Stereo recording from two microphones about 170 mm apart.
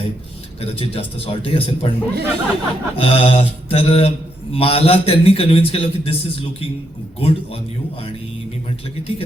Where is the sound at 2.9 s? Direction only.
35° left (ahead or behind).